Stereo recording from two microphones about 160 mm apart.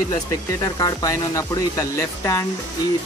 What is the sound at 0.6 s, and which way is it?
Speech, 20° left (ahead or behind).